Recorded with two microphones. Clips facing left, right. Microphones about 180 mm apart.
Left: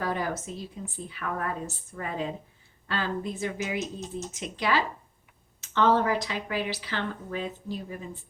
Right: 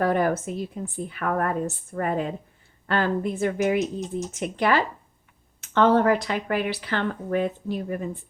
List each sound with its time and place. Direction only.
0.0 s speech: 55° right (ahead or behind)